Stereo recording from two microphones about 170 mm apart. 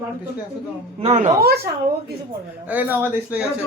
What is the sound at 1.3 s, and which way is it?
Speech, 65° right (ahead or behind).